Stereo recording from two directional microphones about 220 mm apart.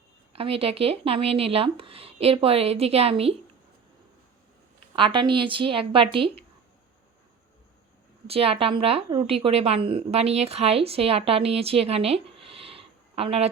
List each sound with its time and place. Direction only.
0.3 s a woman's voice: 25° right (ahead or behind)
4.9 s a woman's voice: 20° right (ahead or behind)
8.3 s a woman's voice: 25° right (ahead or behind)